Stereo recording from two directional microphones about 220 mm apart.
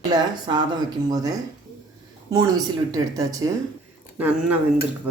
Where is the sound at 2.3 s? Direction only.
15° right (ahead or behind).